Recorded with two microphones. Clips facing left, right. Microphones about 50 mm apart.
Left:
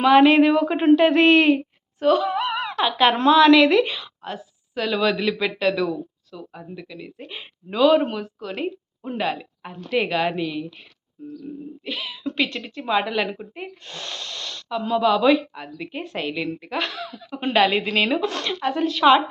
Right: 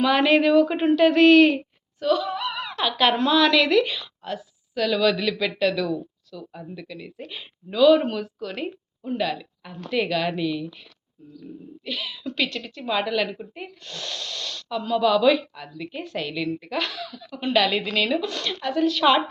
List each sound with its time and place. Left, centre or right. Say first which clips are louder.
0.0 s a woman's voice: left 5 dB; centre
2.0 s a sound: left 4 dB; left
2.6 s a woman's voice: left 2 dB; left
9.1 s a woman's voice: left 1 dB; left
11.9 s a woman's voice: left 1 dB; centre